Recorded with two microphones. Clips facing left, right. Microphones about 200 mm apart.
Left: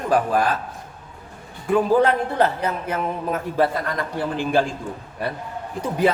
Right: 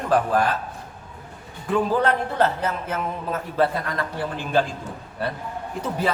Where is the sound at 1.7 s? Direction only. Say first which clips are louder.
Left 4 dB; 15° left (ahead or behind).